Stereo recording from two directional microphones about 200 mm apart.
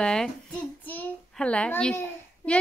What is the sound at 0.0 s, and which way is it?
A child's voice, 5° left (ahead or behind).